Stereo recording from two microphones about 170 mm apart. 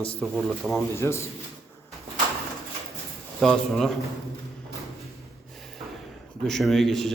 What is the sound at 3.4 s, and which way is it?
Speech, centre (ahead or behind).